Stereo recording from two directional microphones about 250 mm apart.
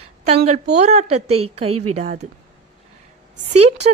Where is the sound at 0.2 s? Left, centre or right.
Right.